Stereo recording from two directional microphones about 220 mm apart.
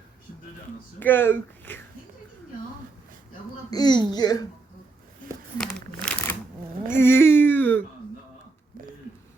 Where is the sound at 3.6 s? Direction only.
20° left (ahead or behind).